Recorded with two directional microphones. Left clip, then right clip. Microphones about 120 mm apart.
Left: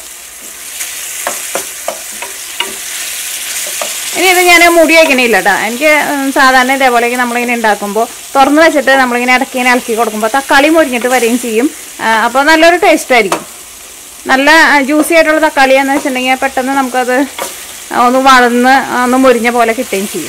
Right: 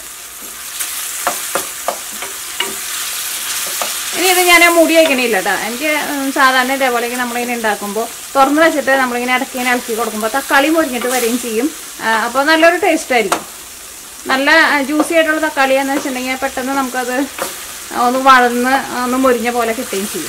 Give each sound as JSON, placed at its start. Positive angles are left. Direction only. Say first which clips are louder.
{"t": 4.2, "sound": "speech", "louder": "left 4 dB", "side_deg": 30}